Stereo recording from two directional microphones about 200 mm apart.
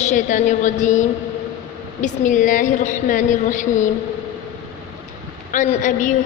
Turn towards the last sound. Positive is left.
turn(degrees=40)  # may be behind; listen again after turning